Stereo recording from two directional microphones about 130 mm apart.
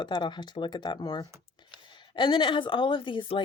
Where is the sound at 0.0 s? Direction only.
35° left (ahead or behind).